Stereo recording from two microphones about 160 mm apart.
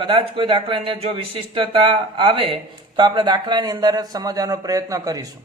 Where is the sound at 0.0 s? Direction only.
30° right (ahead or behind).